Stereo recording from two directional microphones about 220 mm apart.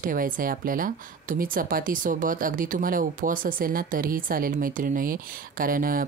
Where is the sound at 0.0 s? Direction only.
40° right (ahead or behind).